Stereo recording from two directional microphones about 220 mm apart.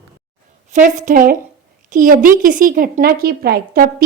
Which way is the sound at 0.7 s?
35° right (ahead or behind).